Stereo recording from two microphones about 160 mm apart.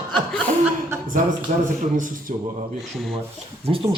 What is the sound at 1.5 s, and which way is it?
Speech, 50° right (ahead or behind).